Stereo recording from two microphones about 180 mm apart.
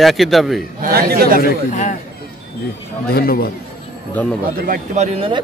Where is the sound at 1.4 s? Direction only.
45° left (ahead or behind).